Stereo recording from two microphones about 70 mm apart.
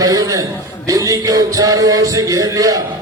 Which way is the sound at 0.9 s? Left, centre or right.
Right.